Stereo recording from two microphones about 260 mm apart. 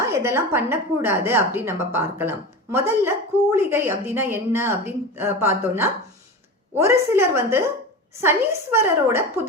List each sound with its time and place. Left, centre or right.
0.0 s a woman's voice: centre